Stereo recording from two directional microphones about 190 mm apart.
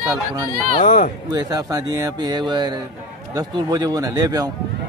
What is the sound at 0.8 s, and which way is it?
Speech, 40° left (ahead or behind).